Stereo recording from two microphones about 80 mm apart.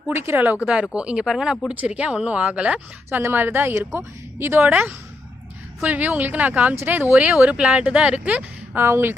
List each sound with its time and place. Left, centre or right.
0.1 s a woman's voice: right
0.6 s speech: centre
1.7 s speech: centre
3.1 s a woman's voice: right
5.8 s a woman's voice: right